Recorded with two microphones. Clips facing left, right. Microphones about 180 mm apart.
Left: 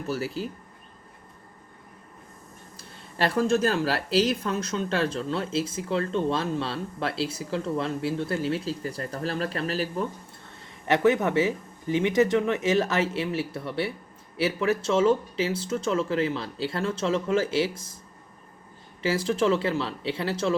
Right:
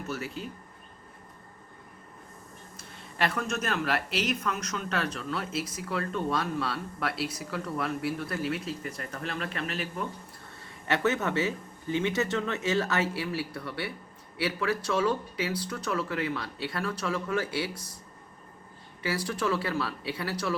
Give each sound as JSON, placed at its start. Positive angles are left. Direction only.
{"t": 0.1, "sound": "speech", "side_deg": 35}
{"t": 2.7, "sound": "speech", "side_deg": 35}
{"t": 10.8, "sound": "speech", "side_deg": 15}
{"t": 19.0, "sound": "speech", "side_deg": 25}